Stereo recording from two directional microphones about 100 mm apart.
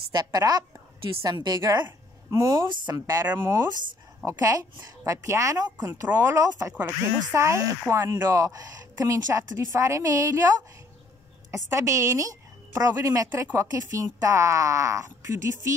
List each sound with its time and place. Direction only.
0.1 s speech: 40° right (ahead or behind)
11.5 s a woman's voice: 30° right (ahead or behind)